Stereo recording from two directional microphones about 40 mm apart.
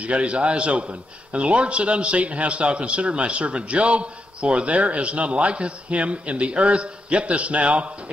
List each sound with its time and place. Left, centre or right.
0.0 s a man's voice: right